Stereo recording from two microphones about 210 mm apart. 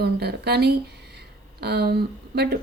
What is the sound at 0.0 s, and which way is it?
Speech, 50° right (ahead or behind).